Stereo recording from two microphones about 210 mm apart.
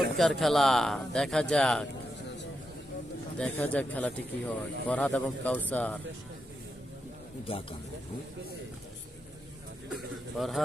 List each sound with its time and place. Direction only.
0.2 s speech: centre (ahead or behind)
3.3 s speech: 5° left (ahead or behind)
7.5 s speech: 25° left (ahead or behind)
10.3 s speech: centre (ahead or behind)